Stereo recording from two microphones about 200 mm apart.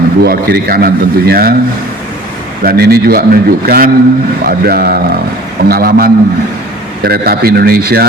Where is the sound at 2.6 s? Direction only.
50° right (ahead or behind).